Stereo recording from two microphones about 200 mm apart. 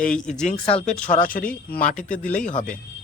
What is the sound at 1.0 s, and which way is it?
Speech, 40° left (ahead or behind).